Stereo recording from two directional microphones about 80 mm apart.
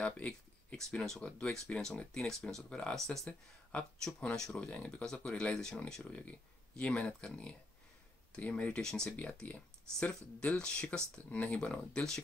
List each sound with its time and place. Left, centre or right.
0.0 s a sound: centre
1.0 s speech: centre
9.1 s speech: centre